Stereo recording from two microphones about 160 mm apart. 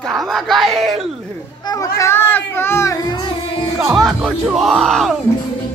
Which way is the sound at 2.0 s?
15° left (ahead or behind).